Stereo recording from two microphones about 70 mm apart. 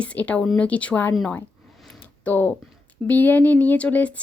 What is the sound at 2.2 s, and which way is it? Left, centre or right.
A woman's voice, left.